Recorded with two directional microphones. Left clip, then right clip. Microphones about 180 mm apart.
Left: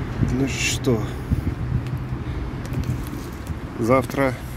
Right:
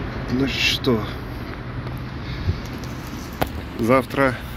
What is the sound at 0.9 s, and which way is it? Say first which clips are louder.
Speech: right 1 dB; 20° left (ahead or behind).